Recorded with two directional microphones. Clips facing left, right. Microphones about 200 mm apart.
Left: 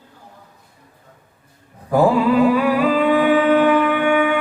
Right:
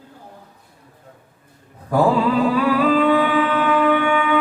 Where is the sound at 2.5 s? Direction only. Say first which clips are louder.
Left 1 dB; 15° left (ahead or behind).